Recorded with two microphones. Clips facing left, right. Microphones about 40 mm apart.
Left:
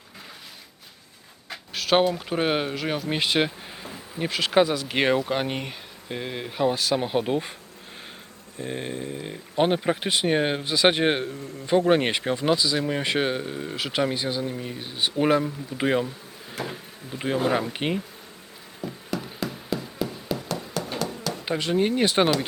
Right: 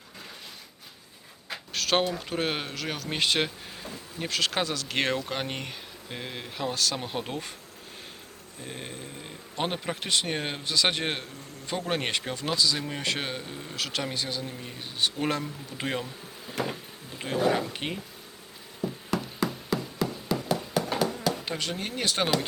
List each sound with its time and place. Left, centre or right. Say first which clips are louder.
1.7 s speech: left 5 dB; centre
8.6 s speech: left 8 dB; centre
17.1 s bee: left 5 dB; centre
17.4 s speech: even; left
20.0 s music: even; centre
20.7 s a sound: right 2 dB; centre
21.4 s speech: left 9 dB; centre